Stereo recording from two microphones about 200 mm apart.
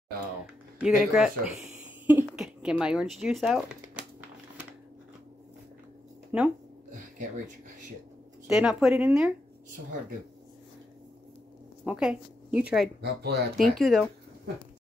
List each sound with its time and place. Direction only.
0.7 s speech: 5° right (ahead or behind)
6.3 s speech: 10° right (ahead or behind)
8.5 s speech: 5° right (ahead or behind)
11.8 s a woman's voice: 5° right (ahead or behind)
13.0 s speech: 55° right (ahead or behind)
13.6 s speech: centre (ahead or behind)